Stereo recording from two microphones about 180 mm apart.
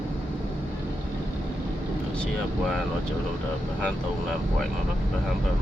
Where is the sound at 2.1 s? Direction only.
5° left (ahead or behind).